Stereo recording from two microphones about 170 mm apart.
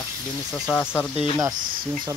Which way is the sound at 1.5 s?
55° right (ahead or behind).